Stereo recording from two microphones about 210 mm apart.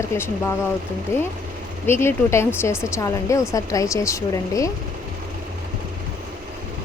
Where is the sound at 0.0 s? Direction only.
15° left (ahead or behind).